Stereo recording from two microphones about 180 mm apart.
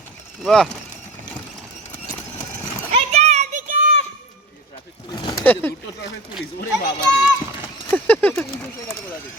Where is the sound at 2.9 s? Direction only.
35° right (ahead or behind).